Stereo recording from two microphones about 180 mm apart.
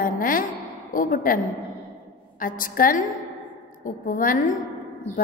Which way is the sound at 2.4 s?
50° left (ahead or behind).